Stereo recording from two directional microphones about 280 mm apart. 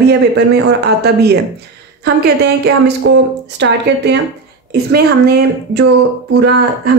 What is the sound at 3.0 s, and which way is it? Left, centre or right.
Speech, right.